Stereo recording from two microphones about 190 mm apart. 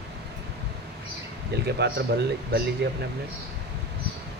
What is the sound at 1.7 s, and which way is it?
A man's voice, 60° right (ahead or behind).